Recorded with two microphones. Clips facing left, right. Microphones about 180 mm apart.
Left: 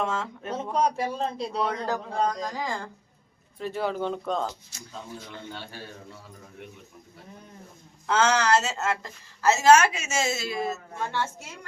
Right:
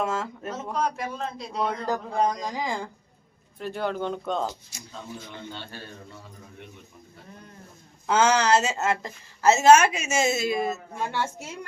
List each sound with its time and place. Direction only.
0.0 s speech: 5° right (ahead or behind)
0.5 s a man's voice: 35° left (ahead or behind)
1.5 s a woman's voice: 5° right (ahead or behind)
3.6 s speech: centre (ahead or behind)
5.5 s a man's voice: 10° left (ahead or behind)
8.0 s a woman's voice: 15° right (ahead or behind)